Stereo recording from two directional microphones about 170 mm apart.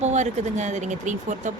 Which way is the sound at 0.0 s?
45° right (ahead or behind).